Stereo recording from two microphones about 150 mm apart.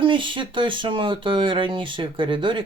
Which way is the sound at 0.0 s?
35° right (ahead or behind).